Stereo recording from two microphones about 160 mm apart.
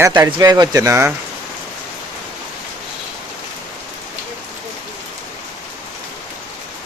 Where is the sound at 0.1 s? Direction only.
25° right (ahead or behind).